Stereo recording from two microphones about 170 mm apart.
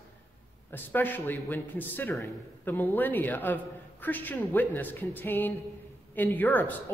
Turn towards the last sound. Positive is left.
turn(degrees=10)  # may be behind; listen again after turning